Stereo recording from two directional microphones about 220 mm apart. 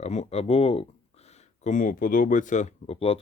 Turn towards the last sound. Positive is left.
turn(degrees=25)  # may be behind; listen again after turning